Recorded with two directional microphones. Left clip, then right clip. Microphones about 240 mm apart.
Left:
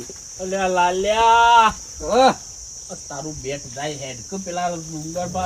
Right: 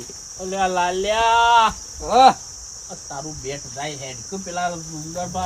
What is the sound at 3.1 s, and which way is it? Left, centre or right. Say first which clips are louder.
Cricket: left 1 dB; centre.